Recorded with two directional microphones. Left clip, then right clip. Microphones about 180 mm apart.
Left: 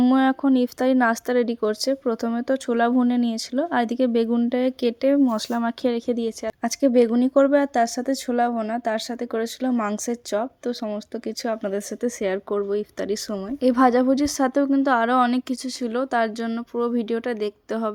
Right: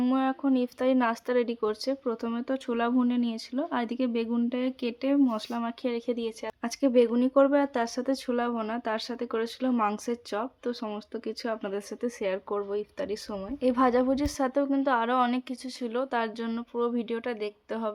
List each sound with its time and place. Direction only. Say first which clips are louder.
0.0 s speech: left 8 dB; 35° left (ahead or behind)